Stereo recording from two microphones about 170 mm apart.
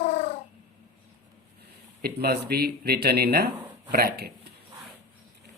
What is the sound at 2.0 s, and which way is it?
A man's voice, 65° right (ahead or behind).